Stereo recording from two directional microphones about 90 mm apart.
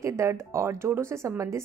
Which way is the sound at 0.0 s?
35° right (ahead or behind).